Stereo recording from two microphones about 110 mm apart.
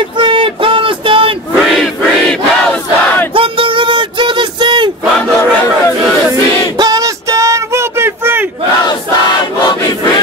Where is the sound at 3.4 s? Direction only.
50° right (ahead or behind).